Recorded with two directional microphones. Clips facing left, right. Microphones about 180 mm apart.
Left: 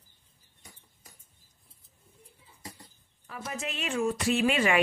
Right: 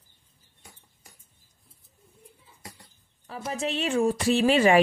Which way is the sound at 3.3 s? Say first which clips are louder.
Right 7 dB; 30° right (ahead or behind).